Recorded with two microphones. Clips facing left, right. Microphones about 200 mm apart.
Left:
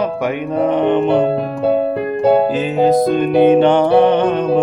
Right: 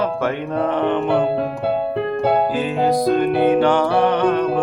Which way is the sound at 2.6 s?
20° left (ahead or behind).